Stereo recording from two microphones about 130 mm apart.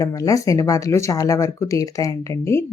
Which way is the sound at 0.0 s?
25° left (ahead or behind).